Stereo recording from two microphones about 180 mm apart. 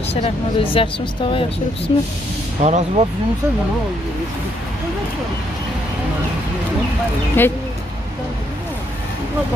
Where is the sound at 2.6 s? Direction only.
40° right (ahead or behind).